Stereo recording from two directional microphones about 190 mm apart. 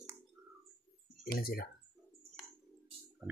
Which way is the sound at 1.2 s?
50° left (ahead or behind).